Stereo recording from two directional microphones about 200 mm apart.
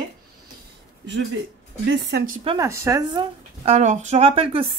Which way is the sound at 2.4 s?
25° right (ahead or behind).